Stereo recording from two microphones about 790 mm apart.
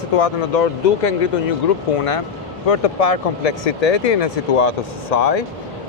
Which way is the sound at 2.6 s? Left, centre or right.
Left.